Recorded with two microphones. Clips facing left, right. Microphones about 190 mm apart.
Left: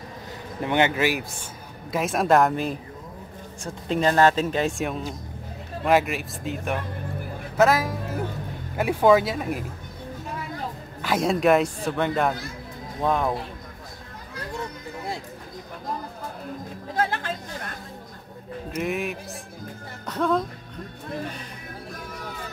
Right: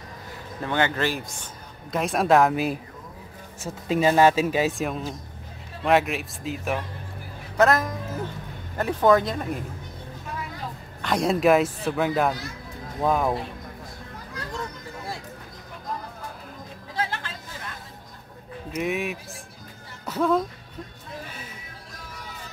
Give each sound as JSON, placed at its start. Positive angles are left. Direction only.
{"t": 0.6, "sound": "a man's voice", "side_deg": 20}
{"t": 11.0, "sound": "a man's voice", "side_deg": 0}
{"t": 16.9, "sound": "chatter", "side_deg": 50}
{"t": 18.7, "sound": "speech", "side_deg": 0}